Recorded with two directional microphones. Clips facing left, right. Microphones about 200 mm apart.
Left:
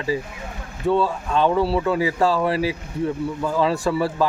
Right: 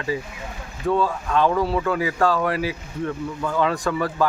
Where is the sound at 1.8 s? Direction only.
25° left (ahead or behind).